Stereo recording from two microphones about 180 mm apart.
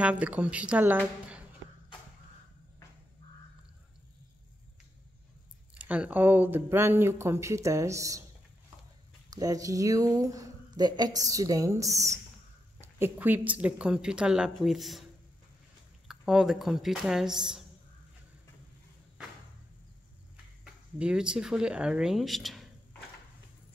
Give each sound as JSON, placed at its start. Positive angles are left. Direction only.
{"t": 0.0, "sound": "speech", "side_deg": -5}
{"t": 5.9, "sound": "speech", "side_deg": -10}
{"t": 9.3, "sound": "speech", "side_deg": -20}
{"t": 16.1, "sound": "speech", "side_deg": 0}
{"t": 20.6, "sound": "speech", "side_deg": -5}